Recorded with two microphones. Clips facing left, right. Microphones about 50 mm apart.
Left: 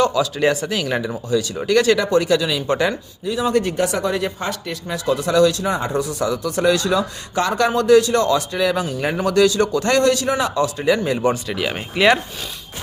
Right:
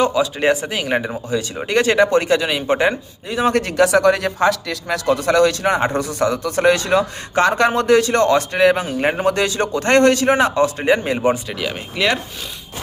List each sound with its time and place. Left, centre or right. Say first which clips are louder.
0.0 s speech: right 1 dB; right
3.6 s speech: right 6 dB; right
11.7 s speech: left 4 dB; centre